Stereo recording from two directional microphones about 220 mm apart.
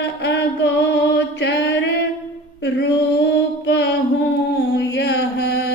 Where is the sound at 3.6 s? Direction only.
55° left (ahead or behind).